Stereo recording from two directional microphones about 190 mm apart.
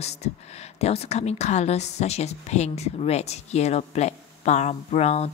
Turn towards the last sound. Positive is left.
turn(degrees=35)  # may be behind; listen again after turning